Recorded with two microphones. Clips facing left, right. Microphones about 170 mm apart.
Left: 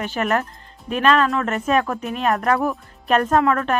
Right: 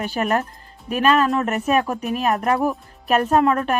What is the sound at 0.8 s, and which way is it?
Speech, 10° right (ahead or behind).